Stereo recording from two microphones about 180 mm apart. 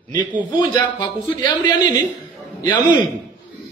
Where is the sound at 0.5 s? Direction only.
25° left (ahead or behind).